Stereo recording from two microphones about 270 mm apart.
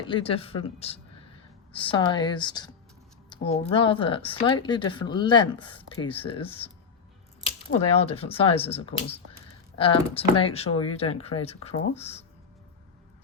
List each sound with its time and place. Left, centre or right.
0.1 s speech: centre
7.9 s speech: left